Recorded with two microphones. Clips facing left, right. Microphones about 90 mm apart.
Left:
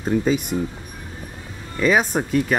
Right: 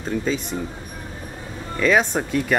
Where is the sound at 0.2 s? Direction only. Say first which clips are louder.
Left 4 dB; 10° left (ahead or behind).